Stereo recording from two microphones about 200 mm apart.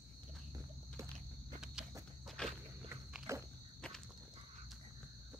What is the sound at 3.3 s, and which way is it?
Walk, 15° right (ahead or behind).